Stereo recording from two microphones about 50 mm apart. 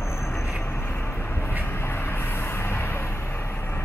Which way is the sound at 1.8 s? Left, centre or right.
Left.